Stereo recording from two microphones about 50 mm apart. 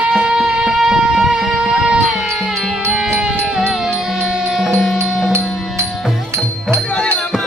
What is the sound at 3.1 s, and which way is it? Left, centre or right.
Music, centre.